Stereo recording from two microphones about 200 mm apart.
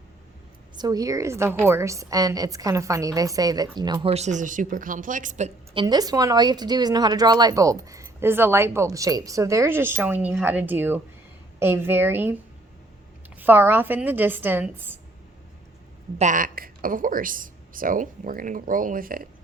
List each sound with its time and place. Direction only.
0.8 s a woman's voice: 20° right (ahead or behind); by 5.5 s 40° right (ahead or behind)
5.7 s a woman's voice: 20° right (ahead or behind)
16.1 s a woman's voice: 40° right (ahead or behind)